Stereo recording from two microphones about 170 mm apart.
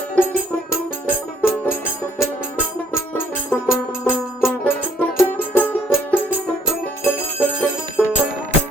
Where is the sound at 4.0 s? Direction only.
10° left (ahead or behind).